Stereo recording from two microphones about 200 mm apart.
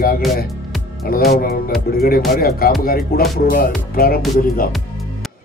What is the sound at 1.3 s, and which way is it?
Speech, 50° left (ahead or behind).